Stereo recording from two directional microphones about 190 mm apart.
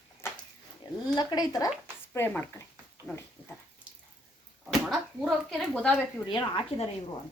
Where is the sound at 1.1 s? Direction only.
20° left (ahead or behind).